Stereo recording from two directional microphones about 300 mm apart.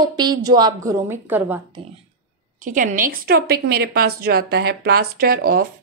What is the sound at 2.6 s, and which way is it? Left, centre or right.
A woman's voice, right.